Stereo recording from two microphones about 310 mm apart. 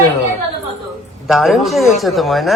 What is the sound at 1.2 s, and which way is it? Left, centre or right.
Speech, centre.